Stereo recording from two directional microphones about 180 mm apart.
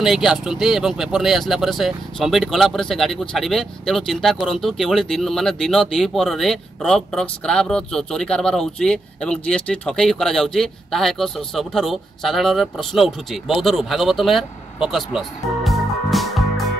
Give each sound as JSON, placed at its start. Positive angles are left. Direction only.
{"t": 0.0, "sound": "speech", "side_deg": 0}